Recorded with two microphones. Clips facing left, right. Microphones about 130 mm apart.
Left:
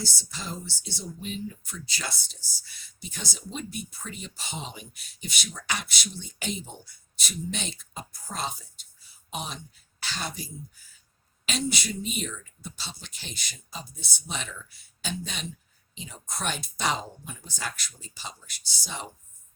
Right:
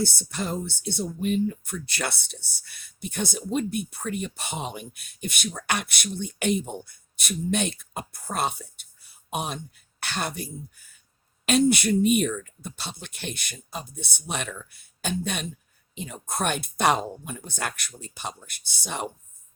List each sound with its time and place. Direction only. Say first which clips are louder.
0.0 s speech: right 9 dB; 60° right (ahead or behind)